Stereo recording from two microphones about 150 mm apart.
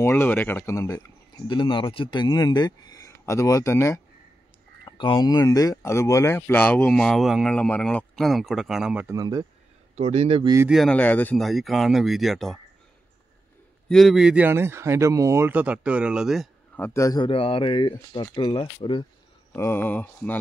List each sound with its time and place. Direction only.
0.0 s speech: 15° left (ahead or behind)
4.8 s speech: 30° left (ahead or behind); by 9.0 s 5° right (ahead or behind)
9.0 s speech: 25° right (ahead or behind)
9.9 s speech: 45° right (ahead or behind)
10.4 s speech: 20° right (ahead or behind)
10.9 s speech: 10° left (ahead or behind)
11.4 s speech: centre (ahead or behind)
13.8 s speech: centre (ahead or behind)
16.7 s speech: 15° left (ahead or behind)
17.2 s speech: 35° left (ahead or behind)
19.5 s speech: 15° left (ahead or behind)